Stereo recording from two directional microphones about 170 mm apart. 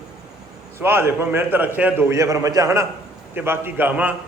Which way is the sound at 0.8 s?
15° right (ahead or behind).